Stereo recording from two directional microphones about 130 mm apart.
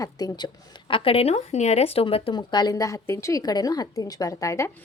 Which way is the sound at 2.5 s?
30° left (ahead or behind).